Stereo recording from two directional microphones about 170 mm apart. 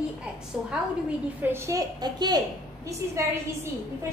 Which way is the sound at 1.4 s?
15° right (ahead or behind).